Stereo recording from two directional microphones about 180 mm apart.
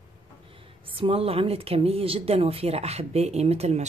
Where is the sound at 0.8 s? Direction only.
30° right (ahead or behind).